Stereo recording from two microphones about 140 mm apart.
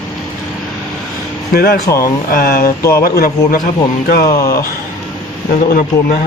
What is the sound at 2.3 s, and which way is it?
A man's voice, 90° left.